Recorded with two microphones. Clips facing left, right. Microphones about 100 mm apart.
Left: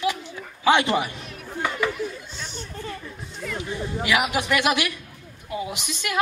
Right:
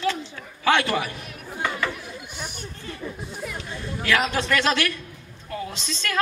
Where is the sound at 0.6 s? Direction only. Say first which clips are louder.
Left 2 dB; 20° left (ahead or behind).